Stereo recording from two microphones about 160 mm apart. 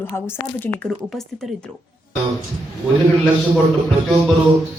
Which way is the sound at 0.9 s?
Centre (ahead or behind).